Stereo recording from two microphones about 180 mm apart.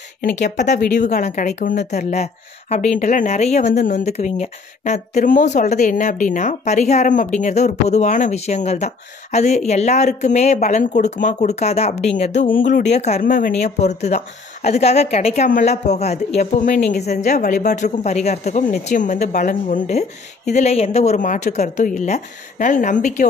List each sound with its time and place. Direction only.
0.2 s a woman's voice: 45° left (ahead or behind)